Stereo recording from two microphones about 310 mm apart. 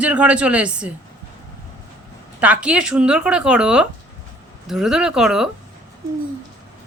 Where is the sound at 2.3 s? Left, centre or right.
Centre.